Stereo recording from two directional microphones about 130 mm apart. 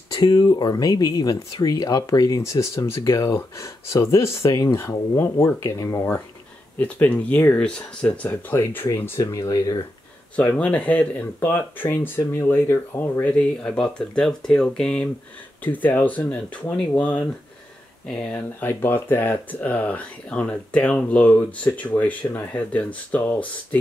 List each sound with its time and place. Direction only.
0.1 s speech: 30° left (ahead or behind)
6.8 s speech: 10° left (ahead or behind); by 9.8 s 25° left (ahead or behind)
10.3 s speech: 10° left (ahead or behind)